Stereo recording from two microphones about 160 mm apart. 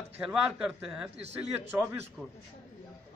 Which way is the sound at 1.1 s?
40° right (ahead or behind).